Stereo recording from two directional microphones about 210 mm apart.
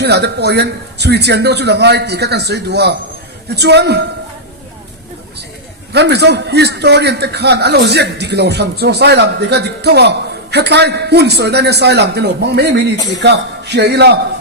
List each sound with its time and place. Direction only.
0.0 s a man's voice: 50° right (ahead or behind)
5.9 s a man's voice: 50° right (ahead or behind)